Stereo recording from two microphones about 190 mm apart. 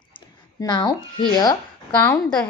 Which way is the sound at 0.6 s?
20° left (ahead or behind).